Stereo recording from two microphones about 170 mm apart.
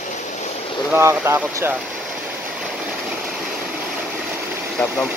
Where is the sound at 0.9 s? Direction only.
15° right (ahead or behind).